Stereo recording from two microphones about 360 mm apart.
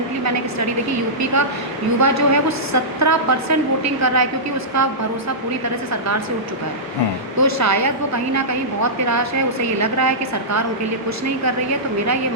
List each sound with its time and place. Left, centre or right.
1.2 s a woman's voice: right
5.9 s a woman's voice: right
7.3 s a woman's voice: right